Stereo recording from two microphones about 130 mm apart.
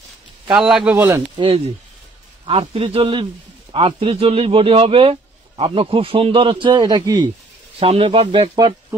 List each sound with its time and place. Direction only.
0.5 s a man's voice: 5° right (ahead or behind)
1.0 s speech: 35° right (ahead or behind)
2.4 s speech: 45° right (ahead or behind)
7.8 s speech: 45° right (ahead or behind)